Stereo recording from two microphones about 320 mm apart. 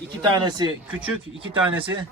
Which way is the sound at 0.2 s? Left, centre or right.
Centre.